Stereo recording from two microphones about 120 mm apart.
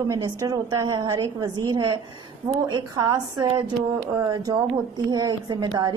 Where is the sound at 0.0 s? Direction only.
30° right (ahead or behind).